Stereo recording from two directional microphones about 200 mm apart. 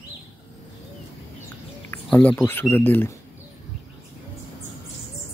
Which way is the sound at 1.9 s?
5° left (ahead or behind).